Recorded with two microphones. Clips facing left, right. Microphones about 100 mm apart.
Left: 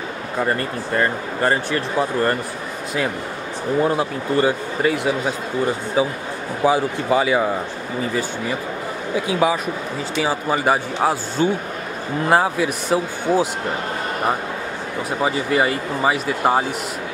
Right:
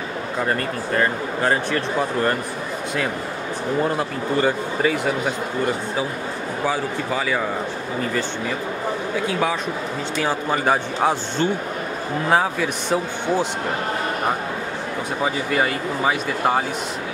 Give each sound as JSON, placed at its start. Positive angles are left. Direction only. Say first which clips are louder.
{"t": 0.9, "sound": "speech", "louder": "left 1 dB", "side_deg": 0}
{"t": 3.8, "sound": "speech", "louder": "left 2 dB", "side_deg": 5}
{"t": 6.6, "sound": "speech", "louder": "left 6 dB", "side_deg": 20}
{"t": 9.3, "sound": "speech", "louder": "left 6 dB", "side_deg": 5}
{"t": 15.2, "sound": "speech", "louder": "left 3 dB", "side_deg": 5}